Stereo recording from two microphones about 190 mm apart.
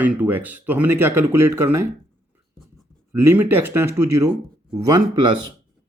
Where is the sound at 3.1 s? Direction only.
15° right (ahead or behind).